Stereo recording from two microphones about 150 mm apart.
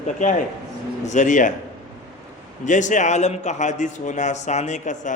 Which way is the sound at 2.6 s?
55° left (ahead or behind).